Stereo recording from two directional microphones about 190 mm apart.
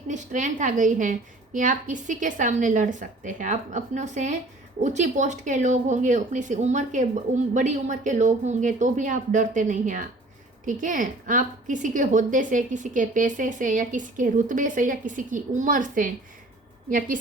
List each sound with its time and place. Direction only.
0.1 s a woman's voice: 40° right (ahead or behind)